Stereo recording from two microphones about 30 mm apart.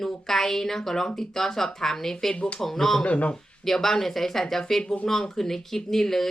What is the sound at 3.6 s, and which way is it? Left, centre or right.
Speech, centre.